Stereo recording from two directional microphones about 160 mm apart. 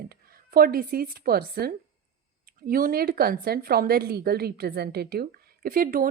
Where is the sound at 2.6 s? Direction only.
65° right (ahead or behind).